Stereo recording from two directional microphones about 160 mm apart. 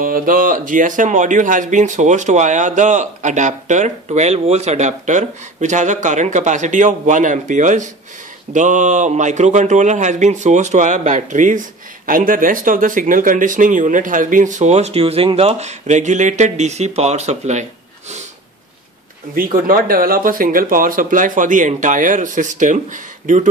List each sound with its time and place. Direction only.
0.0 s speech: 60° right (ahead or behind); by 17.6 s 45° right (ahead or behind)
19.3 s speech: 65° right (ahead or behind)